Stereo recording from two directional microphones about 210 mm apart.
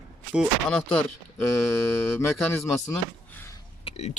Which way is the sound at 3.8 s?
30° left (ahead or behind).